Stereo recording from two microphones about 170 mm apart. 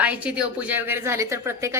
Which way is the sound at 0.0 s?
10° right (ahead or behind).